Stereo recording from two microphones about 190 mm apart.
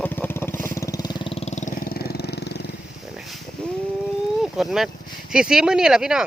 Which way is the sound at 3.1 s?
Centre (ahead or behind).